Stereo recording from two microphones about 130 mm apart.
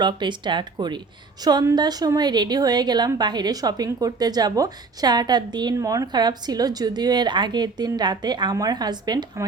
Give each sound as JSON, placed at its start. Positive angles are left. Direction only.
{"t": 0.0, "sound": "a woman's voice", "side_deg": -35}